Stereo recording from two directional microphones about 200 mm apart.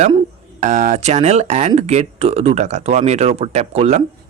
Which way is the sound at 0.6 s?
35° right (ahead or behind).